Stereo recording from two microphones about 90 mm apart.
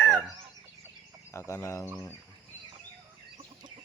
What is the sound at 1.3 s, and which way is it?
Chicken, 30° left (ahead or behind).